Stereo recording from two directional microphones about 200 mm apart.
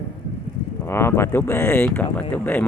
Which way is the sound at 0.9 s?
10° left (ahead or behind).